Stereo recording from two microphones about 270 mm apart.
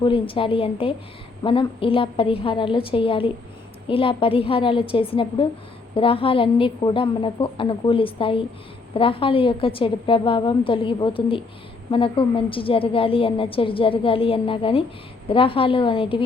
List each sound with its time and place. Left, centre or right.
0.0 s a woman's voice: centre